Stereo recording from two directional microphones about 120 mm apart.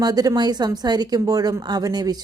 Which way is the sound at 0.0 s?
30° right (ahead or behind).